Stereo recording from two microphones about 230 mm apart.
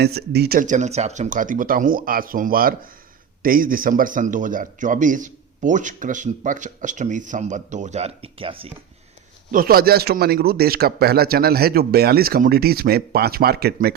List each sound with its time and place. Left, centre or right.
0.0 s a man's voice: right
9.5 s speech: right